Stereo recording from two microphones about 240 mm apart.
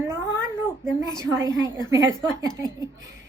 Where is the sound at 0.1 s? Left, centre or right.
Centre.